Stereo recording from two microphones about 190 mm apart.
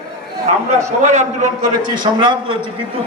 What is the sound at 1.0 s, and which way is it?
Speech, 40° right (ahead or behind).